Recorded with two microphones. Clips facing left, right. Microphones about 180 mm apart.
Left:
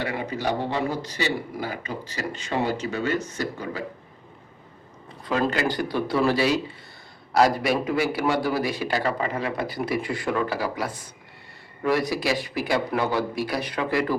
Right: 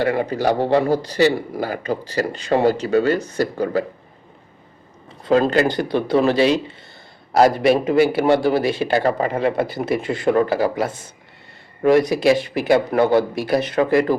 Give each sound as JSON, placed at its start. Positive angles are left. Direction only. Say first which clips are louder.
{"t": 0.1, "sound": "speech", "louder": "right 8 dB", "side_deg": -35}
{"t": 5.2, "sound": "speech", "louder": "right 8 dB", "side_deg": -30}
{"t": 12.0, "sound": "speech", "louder": "right 9 dB", "side_deg": -25}
{"t": 12.6, "sound": "speech", "louder": "right 9 dB", "side_deg": -60}
{"t": 13.0, "sound": "speech", "louder": "right 9 dB", "side_deg": -30}
{"t": 13.8, "sound": "speech", "louder": "right 9 dB", "side_deg": -40}